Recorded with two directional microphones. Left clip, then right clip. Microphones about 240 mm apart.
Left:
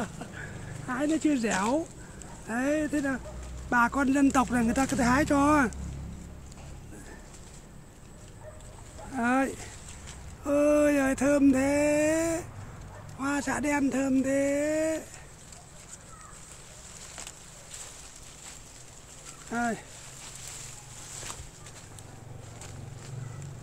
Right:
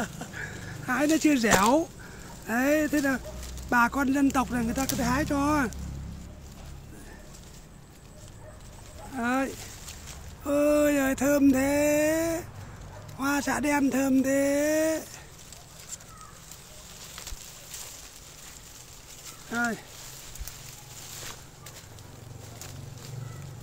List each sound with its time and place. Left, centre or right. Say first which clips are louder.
0.0 s a sound: right 3 dB; centre
2.4 s speech: right 4 dB; centre
3.7 s speech: right 1 dB; centre; by 5.7 s left
9.1 s speech: left 1 dB; centre
10.4 s a sound: even; centre
13.2 s speech: right 2 dB; centre
19.5 s speech: right 1 dB; centre